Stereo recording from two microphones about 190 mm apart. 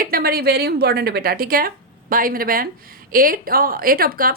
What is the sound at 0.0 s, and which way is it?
A woman's voice, 50° right (ahead or behind).